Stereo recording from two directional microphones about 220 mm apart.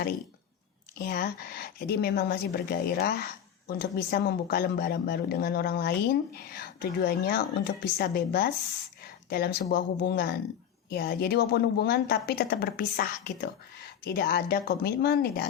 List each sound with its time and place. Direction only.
0.9 s a woman's voice: 45° left (ahead or behind)